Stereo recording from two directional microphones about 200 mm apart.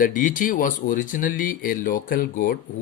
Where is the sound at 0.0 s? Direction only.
40° left (ahead or behind).